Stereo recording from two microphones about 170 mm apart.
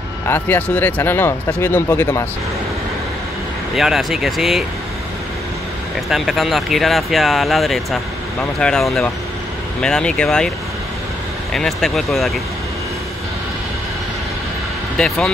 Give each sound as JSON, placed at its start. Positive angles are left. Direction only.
{"t": 0.3, "sound": "speech", "side_deg": 10}
{"t": 3.7, "sound": "speech", "side_deg": 0}
{"t": 6.0, "sound": "speech", "side_deg": 0}
{"t": 11.5, "sound": "speech", "side_deg": 0}
{"t": 15.0, "sound": "speech", "side_deg": 5}